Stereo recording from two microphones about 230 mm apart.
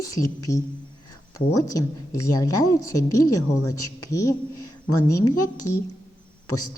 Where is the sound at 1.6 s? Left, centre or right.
Centre.